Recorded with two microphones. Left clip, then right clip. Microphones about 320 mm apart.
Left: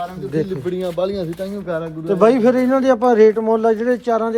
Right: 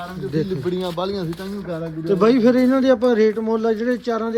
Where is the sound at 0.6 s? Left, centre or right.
Right.